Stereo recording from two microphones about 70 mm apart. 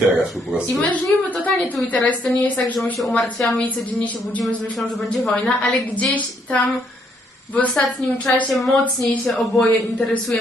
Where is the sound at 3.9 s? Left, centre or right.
Left.